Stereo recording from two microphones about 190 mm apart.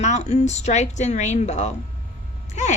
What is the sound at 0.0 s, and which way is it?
Speech, 35° left (ahead or behind).